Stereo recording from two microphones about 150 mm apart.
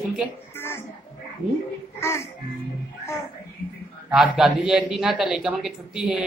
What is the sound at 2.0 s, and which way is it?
Speech, 15° left (ahead or behind).